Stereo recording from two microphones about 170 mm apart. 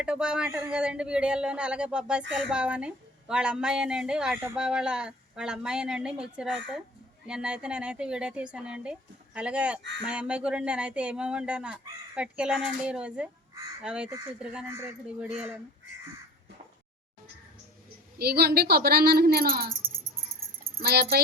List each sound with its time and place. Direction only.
0.0 s a woman's voice: 5° right (ahead or behind)
18.2 s a child's voice: 65° right (ahead or behind)
20.7 s speech: 70° right (ahead or behind)